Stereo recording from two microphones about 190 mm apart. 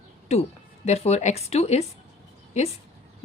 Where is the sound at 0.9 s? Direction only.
35° left (ahead or behind).